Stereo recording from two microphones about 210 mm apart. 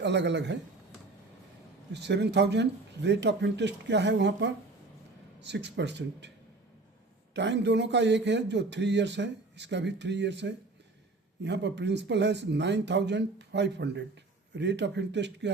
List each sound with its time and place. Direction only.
0.0 s speech: 55° right (ahead or behind)
1.9 s speech: 55° right (ahead or behind)
7.3 s speech: 55° right (ahead or behind)